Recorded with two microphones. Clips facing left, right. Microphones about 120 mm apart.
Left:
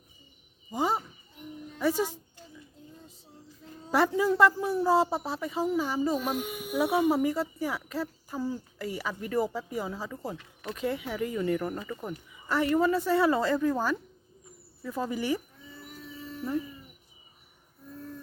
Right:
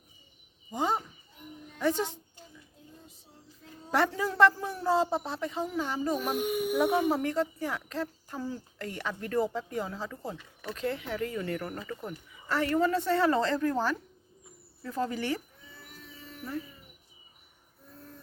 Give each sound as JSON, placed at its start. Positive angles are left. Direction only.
{"t": 0.7, "sound": "a woman's voice", "side_deg": 5}
{"t": 3.9, "sound": "a woman's voice", "side_deg": 10}
{"t": 16.4, "sound": "speech", "side_deg": 20}